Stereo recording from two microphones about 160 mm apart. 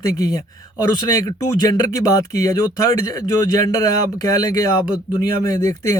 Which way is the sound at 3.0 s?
20° left (ahead or behind).